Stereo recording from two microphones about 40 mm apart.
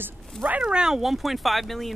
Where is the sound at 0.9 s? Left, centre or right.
Centre.